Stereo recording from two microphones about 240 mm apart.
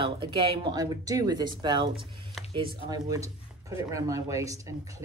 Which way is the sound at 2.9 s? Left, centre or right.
Centre.